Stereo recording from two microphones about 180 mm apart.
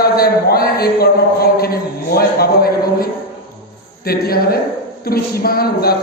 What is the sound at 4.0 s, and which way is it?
Speech, 60° left (ahead or behind).